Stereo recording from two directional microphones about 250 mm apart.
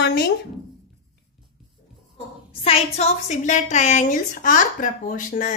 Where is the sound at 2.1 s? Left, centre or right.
Left.